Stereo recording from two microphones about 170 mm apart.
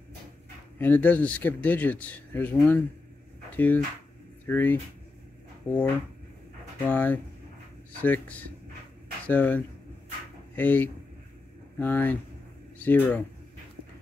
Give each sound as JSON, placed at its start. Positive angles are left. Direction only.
{"t": 0.7, "sound": "speech", "side_deg": 10}
{"t": 6.9, "sound": "speech", "side_deg": 10}